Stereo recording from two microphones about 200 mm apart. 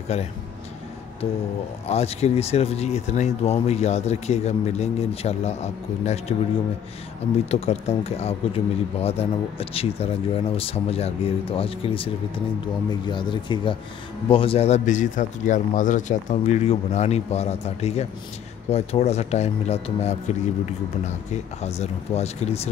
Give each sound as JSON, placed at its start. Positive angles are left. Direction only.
{"t": 0.1, "sound": "speech", "side_deg": 30}
{"t": 1.9, "sound": "speech", "side_deg": 30}
{"t": 7.5, "sound": "speech", "side_deg": 30}
{"t": 13.1, "sound": "speech", "side_deg": 25}